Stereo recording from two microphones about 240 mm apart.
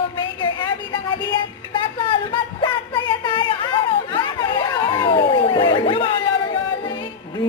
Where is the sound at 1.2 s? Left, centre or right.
Centre.